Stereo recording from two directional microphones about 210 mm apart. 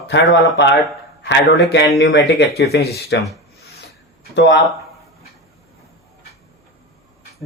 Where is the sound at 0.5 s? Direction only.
55° left (ahead or behind).